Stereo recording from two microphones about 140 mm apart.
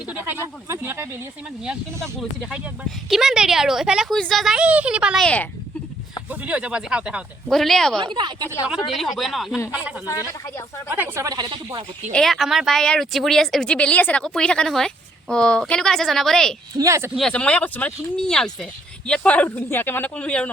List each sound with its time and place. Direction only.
0.1 s speech: 15° right (ahead or behind)
2.1 s speech: centre (ahead or behind)
5.2 s speech: 10° left (ahead or behind)
6.4 s speech: 10° right (ahead or behind)
8.0 s speech: 35° right (ahead or behind)
8.9 s speech: centre (ahead or behind)
10.8 s speech: 15° right (ahead or behind)
12.1 s speech: centre (ahead or behind)
16.7 s speech: 25° right (ahead or behind)
17.2 s speech: 5° left (ahead or behind)